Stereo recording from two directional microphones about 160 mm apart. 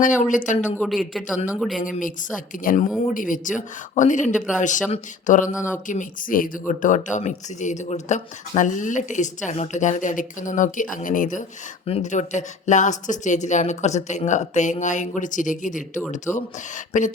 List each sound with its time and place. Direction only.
0.0 s speech: 55° left (ahead or behind)
0.8 s speech: centre (ahead or behind)
1.8 s a woman's voice: 55° left (ahead or behind)